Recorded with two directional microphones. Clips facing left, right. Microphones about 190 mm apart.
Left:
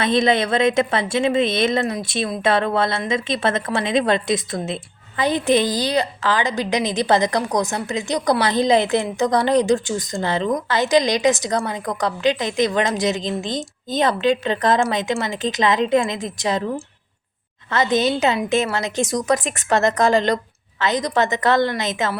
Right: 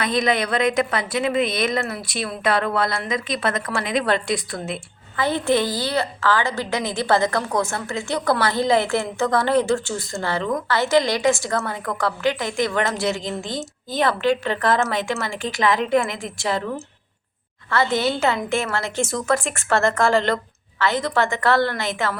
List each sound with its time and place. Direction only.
0.0 s a woman's voice: 25° left (ahead or behind)